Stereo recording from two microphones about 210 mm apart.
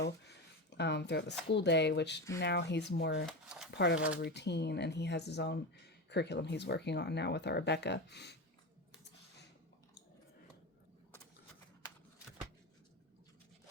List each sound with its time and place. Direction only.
0.7 s speech: 55° left (ahead or behind)
3.2 s speech: centre (ahead or behind)
3.7 s speech: 55° left (ahead or behind)